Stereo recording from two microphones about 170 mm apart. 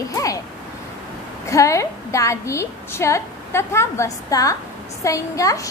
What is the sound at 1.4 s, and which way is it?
A woman's voice, 20° left (ahead or behind).